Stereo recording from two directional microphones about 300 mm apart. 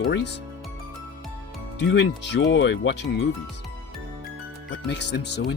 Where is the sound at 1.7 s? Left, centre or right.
Left.